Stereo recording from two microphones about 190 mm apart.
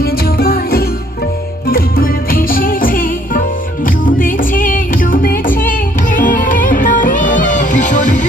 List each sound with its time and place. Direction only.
0.0 s music: 50° left (ahead or behind)